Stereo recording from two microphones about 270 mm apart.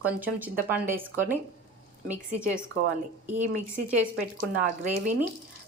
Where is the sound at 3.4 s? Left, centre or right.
Right.